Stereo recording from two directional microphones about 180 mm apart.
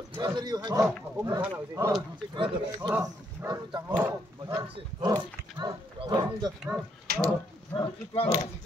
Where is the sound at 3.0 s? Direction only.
20° right (ahead or behind).